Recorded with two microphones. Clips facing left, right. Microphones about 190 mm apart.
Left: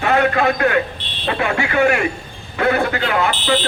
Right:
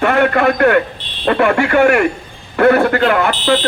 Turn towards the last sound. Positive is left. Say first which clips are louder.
# right 4 dB
turn(degrees=-45)  # may be behind; listen again after turning